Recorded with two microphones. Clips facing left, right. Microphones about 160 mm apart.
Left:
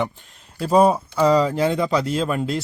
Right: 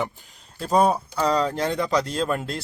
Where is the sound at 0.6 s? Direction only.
5° left (ahead or behind).